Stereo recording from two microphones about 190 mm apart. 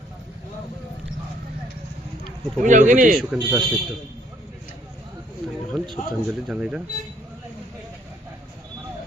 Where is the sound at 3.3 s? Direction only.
25° right (ahead or behind).